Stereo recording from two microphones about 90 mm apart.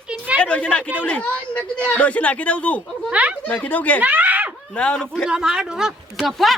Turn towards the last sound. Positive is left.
turn(degrees=0)  # may be behind; listen again after turning